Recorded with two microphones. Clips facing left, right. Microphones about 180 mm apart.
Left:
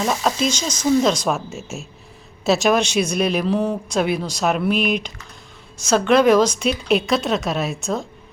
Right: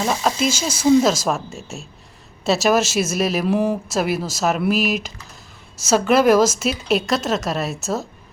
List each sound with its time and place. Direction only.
0.0 s speech: centre (ahead or behind)